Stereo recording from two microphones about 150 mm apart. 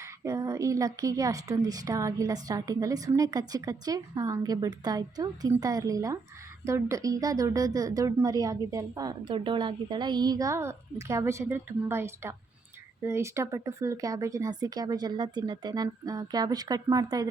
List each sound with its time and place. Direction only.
0.3 s speech: 20° right (ahead or behind)